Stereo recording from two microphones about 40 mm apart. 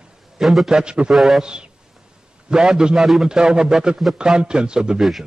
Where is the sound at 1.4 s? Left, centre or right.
Right.